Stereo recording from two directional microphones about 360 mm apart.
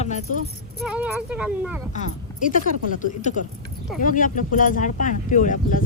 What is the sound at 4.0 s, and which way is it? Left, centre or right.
Speech, left.